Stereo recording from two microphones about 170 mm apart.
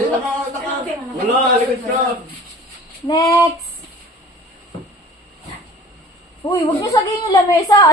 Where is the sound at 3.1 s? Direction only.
20° left (ahead or behind).